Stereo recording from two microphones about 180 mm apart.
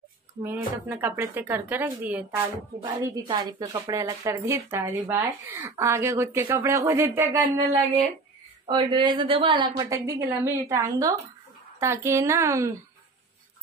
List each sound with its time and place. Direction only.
0.4 s a woman's voice: 10° right (ahead or behind)
2.8 s a woman's voice: 25° right (ahead or behind)
8.6 s a woman's voice: 25° right (ahead or behind)